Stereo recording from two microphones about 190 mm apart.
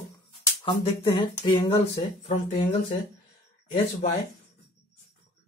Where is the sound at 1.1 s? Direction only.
25° left (ahead or behind).